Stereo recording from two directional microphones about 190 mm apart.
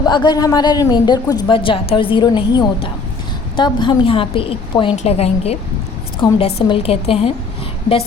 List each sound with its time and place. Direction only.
0.0 s a woman's voice: 25° left (ahead or behind)